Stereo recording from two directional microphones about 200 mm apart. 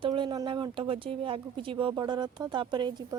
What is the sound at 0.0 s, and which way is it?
A woman's voice, 25° right (ahead or behind).